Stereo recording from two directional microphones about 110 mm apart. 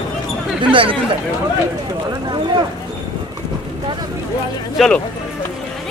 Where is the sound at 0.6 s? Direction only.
50° right (ahead or behind).